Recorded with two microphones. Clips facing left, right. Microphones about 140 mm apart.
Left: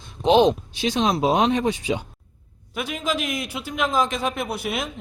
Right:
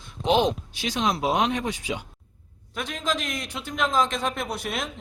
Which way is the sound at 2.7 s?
10° left (ahead or behind).